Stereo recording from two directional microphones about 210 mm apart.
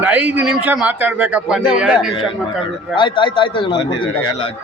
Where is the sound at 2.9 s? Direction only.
25° left (ahead or behind).